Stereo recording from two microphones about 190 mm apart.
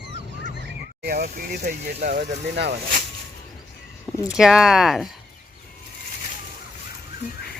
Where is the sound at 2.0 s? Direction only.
40° right (ahead or behind).